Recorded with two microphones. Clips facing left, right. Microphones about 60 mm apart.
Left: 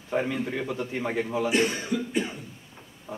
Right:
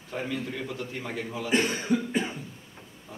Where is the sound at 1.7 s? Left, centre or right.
Right.